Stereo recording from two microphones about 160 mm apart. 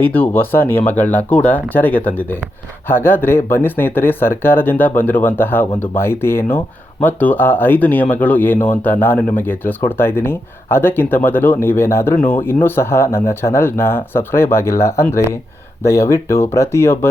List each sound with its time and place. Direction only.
0.0 s speech: 10° left (ahead or behind)